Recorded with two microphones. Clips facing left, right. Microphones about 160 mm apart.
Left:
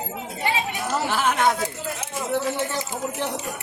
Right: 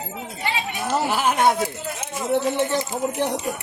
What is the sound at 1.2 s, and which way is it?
Speech, 25° right (ahead or behind).